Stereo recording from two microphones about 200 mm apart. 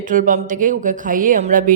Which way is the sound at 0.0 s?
40° right (ahead or behind).